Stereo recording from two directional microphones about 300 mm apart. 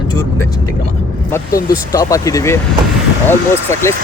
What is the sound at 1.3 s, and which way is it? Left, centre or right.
Speech, centre.